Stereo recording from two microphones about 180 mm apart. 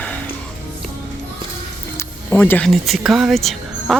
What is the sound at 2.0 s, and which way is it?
Speech, 10° left (ahead or behind).